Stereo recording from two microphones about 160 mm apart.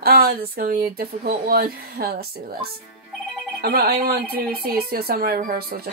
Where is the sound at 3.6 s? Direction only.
75° right (ahead or behind).